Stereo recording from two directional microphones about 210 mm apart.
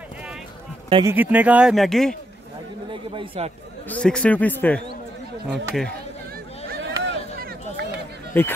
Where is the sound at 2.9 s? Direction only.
25° right (ahead or behind).